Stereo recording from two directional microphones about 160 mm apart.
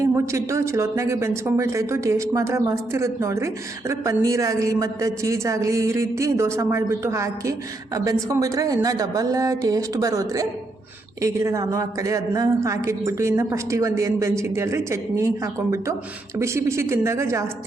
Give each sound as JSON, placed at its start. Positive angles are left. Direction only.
{"t": 0.0, "sound": "speech", "side_deg": -20}
{"t": 16.4, "sound": "speech", "side_deg": -15}